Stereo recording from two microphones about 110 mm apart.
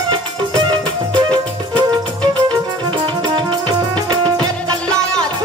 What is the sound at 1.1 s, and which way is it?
Music, 40° right (ahead or behind).